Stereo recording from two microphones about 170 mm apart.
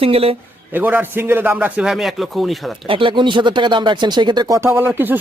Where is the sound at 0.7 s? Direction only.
10° right (ahead or behind).